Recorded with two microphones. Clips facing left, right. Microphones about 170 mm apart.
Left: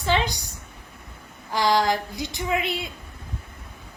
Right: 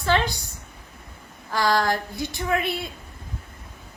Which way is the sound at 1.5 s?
15° left (ahead or behind).